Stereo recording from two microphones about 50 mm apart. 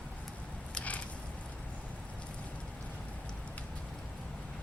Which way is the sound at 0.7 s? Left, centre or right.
Left.